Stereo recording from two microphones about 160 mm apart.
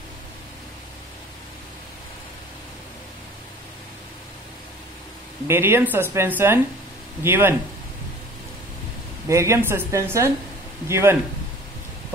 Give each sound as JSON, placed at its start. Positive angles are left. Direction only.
{"t": 5.5, "sound": "speech", "side_deg": -15}
{"t": 9.3, "sound": "speech", "side_deg": -20}